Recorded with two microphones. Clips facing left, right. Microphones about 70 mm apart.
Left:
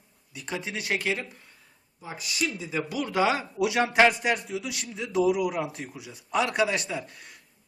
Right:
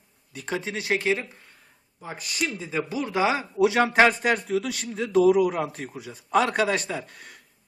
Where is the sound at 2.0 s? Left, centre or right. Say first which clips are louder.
Right 1 dB; right.